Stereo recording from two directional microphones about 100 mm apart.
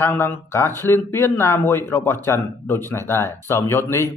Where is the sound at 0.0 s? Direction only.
20° left (ahead or behind).